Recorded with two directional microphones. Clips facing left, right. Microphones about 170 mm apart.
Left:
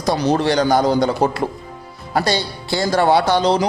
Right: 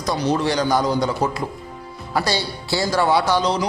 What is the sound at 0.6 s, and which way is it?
Speech, 55° left (ahead or behind).